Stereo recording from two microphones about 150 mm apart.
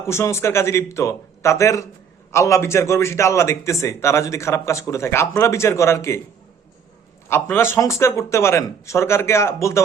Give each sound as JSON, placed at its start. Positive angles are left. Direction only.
{"t": 0.0, "sound": "a man's voice", "side_deg": 20}
{"t": 7.3, "sound": "a man's voice", "side_deg": 15}